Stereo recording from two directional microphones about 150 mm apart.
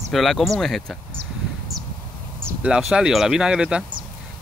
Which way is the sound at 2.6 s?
5° right (ahead or behind).